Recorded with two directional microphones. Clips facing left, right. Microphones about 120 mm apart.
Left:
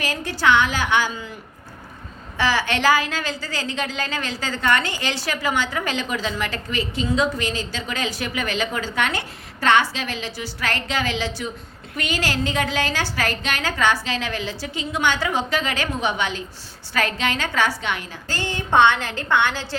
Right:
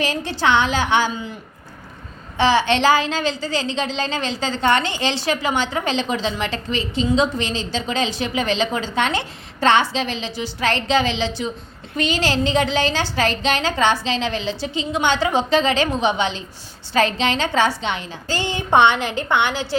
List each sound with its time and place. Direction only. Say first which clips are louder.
0.0 s a woman's voice: right 1 dB; 25° right (ahead or behind)
2.4 s a woman's voice: right 5 dB; 25° right (ahead or behind)